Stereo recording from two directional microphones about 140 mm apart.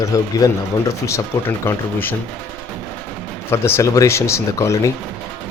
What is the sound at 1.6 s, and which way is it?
Speech, 15° left (ahead or behind).